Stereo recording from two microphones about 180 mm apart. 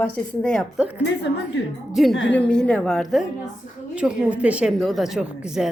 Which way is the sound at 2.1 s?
85° left.